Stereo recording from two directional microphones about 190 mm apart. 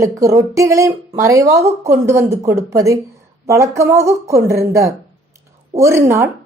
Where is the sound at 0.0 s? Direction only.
15° right (ahead or behind).